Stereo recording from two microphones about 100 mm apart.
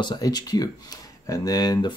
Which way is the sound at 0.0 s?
45° left (ahead or behind).